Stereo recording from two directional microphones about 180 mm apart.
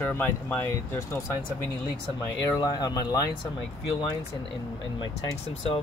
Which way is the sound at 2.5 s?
20° left (ahead or behind).